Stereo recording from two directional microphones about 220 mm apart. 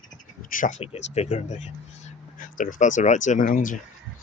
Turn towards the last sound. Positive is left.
turn(degrees=35)  # may be behind; listen again after turning